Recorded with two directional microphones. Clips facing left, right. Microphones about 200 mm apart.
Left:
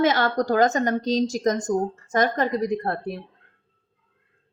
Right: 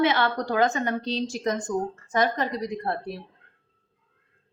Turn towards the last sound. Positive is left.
turn(degrees=50)  # may be behind; listen again after turning